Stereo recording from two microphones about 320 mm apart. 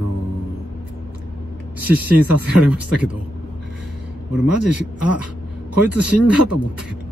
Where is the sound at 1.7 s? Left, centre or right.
Centre.